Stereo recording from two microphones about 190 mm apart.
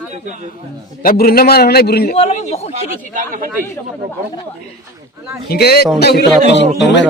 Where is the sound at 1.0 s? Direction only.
50° left (ahead or behind).